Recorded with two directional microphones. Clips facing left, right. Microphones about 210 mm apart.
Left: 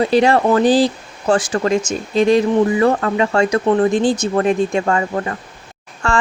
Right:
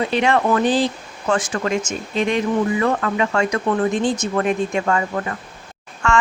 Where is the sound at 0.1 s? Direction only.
35° left (ahead or behind).